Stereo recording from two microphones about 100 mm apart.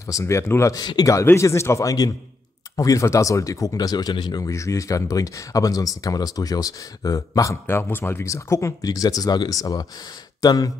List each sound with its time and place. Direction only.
0.0 s speech: 30° left (ahead or behind)
0.7 s a man's voice: 40° left (ahead or behind)
1.2 s speech: 25° left (ahead or behind); by 4.4 s 45° left (ahead or behind)
4.4 s speech: 30° left (ahead or behind)
7.6 s speech: 20° left (ahead or behind); by 10.7 s 40° left (ahead or behind)